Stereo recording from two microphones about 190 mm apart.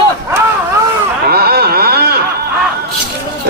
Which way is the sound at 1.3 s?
55° right (ahead or behind).